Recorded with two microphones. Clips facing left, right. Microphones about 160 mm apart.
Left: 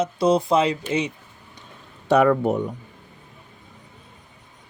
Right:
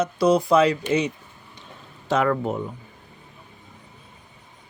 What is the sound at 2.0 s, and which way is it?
Speech, 75° left (ahead or behind).